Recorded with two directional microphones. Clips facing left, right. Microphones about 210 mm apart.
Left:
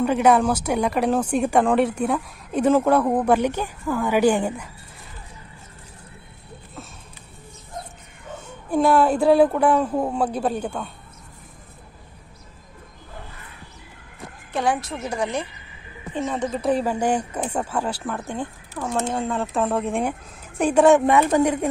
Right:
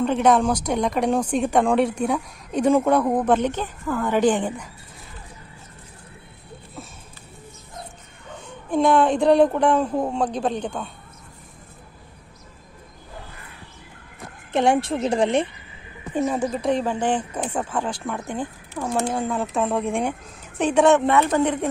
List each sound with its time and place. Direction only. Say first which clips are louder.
0.0 s speech: left 1 dB; 5° left (ahead or behind)
8.6 s speech: even; 5° left (ahead or behind)
14.5 s a woman's voice: right 5 dB; 25° right (ahead or behind)
16.2 s speech: right 2 dB; 10° right (ahead or behind)
16.6 s speech: left 2 dB; 10° left (ahead or behind)
18.7 s speech: right 1 dB; 10° right (ahead or behind)
19.1 s a woman's voice: even; centre (ahead or behind)